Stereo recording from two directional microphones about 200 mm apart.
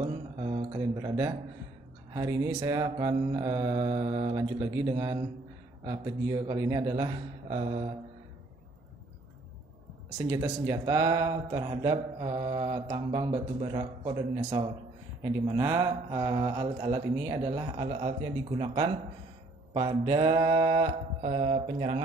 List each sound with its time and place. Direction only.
0.4 s a sound: 25° right (ahead or behind)
2.1 s mantra: 15° right (ahead or behind)
5.9 s a man's voice: 20° right (ahead or behind)
7.4 s a man's voice: 30° right (ahead or behind)
10.4 s a man's voice: 15° right (ahead or behind)
19.7 s a man's voice: 25° right (ahead or behind)